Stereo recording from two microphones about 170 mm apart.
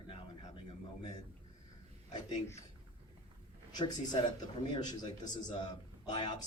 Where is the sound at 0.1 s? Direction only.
30° left (ahead or behind).